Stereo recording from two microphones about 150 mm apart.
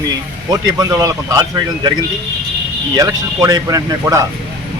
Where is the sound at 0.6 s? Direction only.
20° right (ahead or behind).